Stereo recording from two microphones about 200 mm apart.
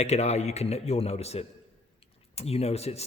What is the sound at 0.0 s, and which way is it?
A man's voice, 35° left (ahead or behind).